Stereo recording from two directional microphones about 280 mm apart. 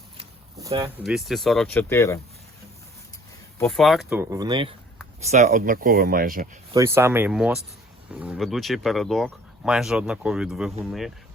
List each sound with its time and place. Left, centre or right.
0.2 s a sound: centre
1.0 s speech: centre
3.6 s speech: centre; by 6.6 s right
6.7 s speech: centre